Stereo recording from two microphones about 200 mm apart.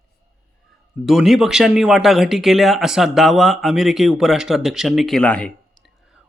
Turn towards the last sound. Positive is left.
turn(degrees=5)  # may be behind; listen again after turning